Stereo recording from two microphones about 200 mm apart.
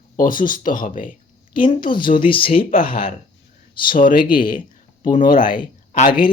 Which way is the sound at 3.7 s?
45° left (ahead or behind).